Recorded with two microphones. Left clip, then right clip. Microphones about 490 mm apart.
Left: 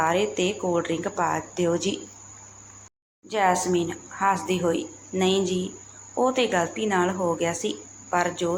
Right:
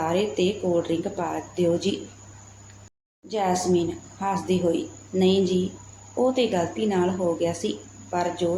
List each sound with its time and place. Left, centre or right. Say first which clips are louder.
0.0 s speech: left 1 dB; right
3.2 s speech: left 2 dB; right